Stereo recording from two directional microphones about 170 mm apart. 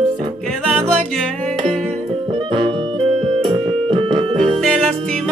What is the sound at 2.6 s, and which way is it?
Music, 30° right (ahead or behind).